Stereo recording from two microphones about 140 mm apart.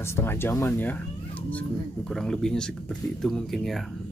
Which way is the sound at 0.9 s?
10° left (ahead or behind).